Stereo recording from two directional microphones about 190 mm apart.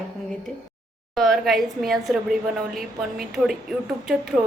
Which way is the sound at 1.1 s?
Centre (ahead or behind).